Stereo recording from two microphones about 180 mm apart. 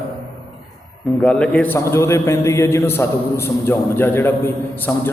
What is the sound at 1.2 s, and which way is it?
A man's voice, 5° left (ahead or behind).